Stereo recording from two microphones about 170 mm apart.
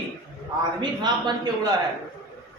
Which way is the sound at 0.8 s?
25° right (ahead or behind).